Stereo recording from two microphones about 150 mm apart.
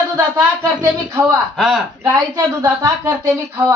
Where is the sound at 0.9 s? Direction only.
20° right (ahead or behind).